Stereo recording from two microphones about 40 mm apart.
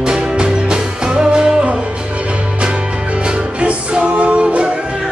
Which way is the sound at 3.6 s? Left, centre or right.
Right.